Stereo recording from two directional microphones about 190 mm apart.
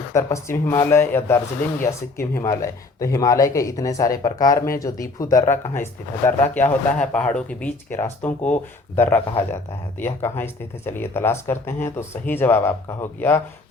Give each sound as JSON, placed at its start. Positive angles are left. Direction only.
{"t": 0.1, "sound": "speech", "side_deg": 15}